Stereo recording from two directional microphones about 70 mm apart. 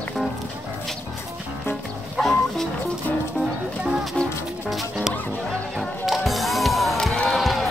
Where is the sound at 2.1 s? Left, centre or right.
Centre.